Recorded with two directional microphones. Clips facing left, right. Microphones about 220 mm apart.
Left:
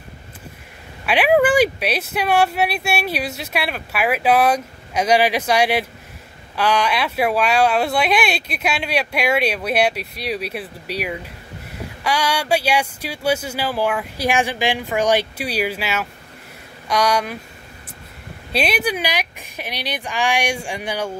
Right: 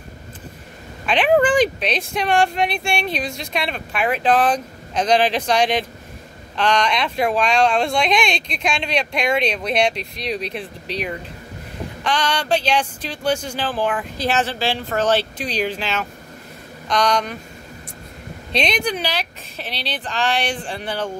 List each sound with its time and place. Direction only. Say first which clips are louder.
1.0 s speech: left 1 dB; 10° left (ahead or behind)
18.5 s speech: left 1 dB; 5° left (ahead or behind)